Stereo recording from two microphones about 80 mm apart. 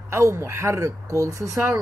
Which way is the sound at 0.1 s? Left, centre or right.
Right.